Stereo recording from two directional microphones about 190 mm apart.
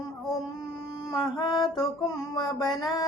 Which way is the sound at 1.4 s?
25° left (ahead or behind).